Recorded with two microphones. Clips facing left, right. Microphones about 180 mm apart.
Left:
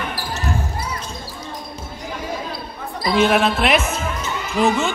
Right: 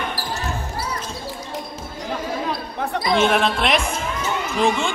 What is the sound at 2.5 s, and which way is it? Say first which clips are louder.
Basketball bounce: right 5 dB; 65° right (ahead or behind).